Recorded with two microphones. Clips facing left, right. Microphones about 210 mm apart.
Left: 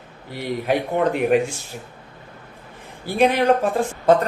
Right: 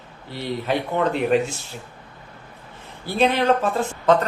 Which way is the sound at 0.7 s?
50° left (ahead or behind).